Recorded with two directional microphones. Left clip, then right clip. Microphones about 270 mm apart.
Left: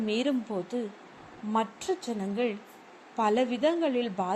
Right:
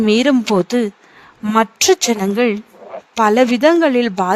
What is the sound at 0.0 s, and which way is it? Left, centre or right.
Speech, right.